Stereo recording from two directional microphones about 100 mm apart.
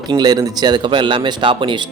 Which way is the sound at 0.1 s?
40° right (ahead or behind).